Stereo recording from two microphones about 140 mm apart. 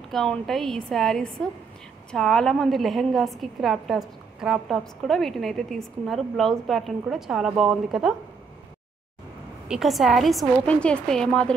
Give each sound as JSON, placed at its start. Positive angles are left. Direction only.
{"t": 0.1, "sound": "a woman's voice", "side_deg": 5}
{"t": 9.7, "sound": "a woman's voice", "side_deg": 0}
{"t": 10.6, "sound": "speech", "side_deg": 10}